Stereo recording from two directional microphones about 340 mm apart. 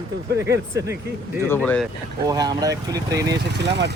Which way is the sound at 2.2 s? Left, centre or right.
Centre.